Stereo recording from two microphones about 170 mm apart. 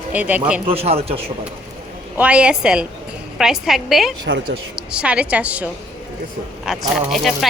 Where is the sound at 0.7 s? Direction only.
35° right (ahead or behind).